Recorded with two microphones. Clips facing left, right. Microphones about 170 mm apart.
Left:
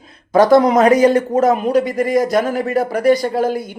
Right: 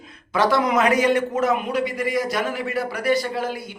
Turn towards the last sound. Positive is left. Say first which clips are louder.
# left 9 dB
turn(degrees=45)  # may be behind; listen again after turning